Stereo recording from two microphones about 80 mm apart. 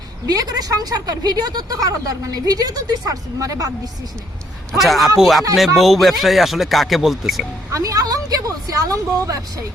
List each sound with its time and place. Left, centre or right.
0.3 s speech: right
4.8 s speech: centre
7.7 s a woman's voice: right